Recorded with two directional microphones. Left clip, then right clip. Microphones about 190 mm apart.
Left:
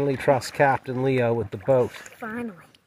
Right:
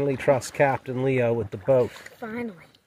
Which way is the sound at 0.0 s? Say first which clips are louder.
Left 1 dB; 20° left (ahead or behind).